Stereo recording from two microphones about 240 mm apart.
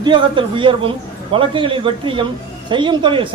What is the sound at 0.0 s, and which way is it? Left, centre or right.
A man's voice, centre.